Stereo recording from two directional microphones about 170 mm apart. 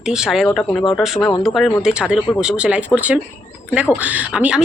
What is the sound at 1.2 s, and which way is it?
Speech, 20° left (ahead or behind).